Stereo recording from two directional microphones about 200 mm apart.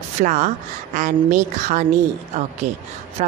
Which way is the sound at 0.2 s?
40° right (ahead or behind).